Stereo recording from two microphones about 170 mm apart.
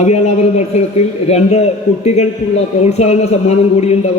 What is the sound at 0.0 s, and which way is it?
A man's voice, 40° left (ahead or behind).